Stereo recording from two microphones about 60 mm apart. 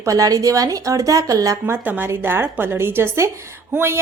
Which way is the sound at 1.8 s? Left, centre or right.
Right.